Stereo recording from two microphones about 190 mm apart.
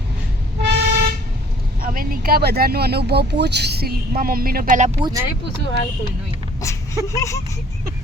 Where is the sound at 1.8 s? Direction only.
50° right (ahead or behind).